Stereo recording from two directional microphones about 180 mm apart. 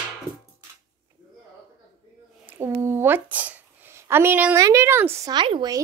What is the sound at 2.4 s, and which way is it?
Speech, 15° right (ahead or behind).